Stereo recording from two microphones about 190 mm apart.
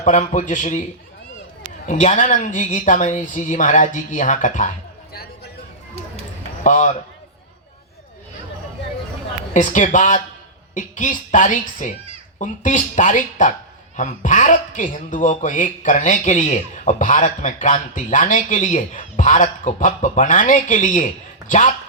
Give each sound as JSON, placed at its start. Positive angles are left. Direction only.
{"t": 0.0, "sound": "speech", "side_deg": 40}
{"t": 1.9, "sound": "speech", "side_deg": 40}
{"t": 6.6, "sound": "speech", "side_deg": 40}
{"t": 9.5, "sound": "a woman's voice", "side_deg": 40}